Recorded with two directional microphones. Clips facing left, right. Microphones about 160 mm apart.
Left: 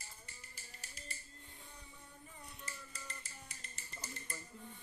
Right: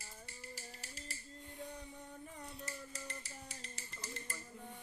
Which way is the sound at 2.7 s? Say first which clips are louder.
Right 4 dB; 70° right (ahead or behind).